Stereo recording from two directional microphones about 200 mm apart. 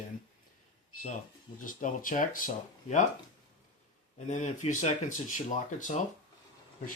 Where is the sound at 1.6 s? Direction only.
40° left (ahead or behind).